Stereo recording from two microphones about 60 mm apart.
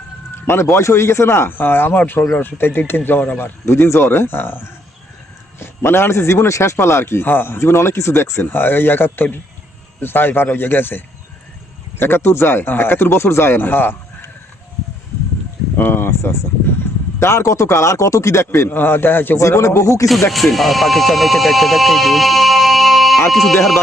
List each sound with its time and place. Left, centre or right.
0.4 s a man's voice: left
15.8 s speech: left
17.2 s a man's voice: left
18.7 s speech: left
19.4 s a man's voice: left
20.3 s speech: centre